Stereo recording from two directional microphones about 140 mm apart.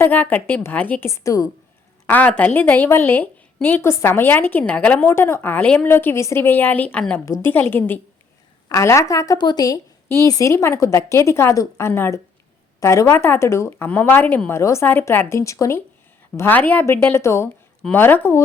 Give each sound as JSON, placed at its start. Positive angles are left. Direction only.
{"t": 0.0, "sound": "a woman's voice", "side_deg": 10}
{"t": 2.0, "sound": "a woman's voice", "side_deg": 10}
{"t": 7.3, "sound": "a woman's voice", "side_deg": 25}
{"t": 16.3, "sound": "a woman's voice", "side_deg": 10}